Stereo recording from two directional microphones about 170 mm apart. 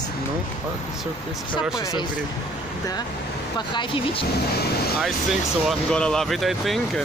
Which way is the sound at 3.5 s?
25° left (ahead or behind).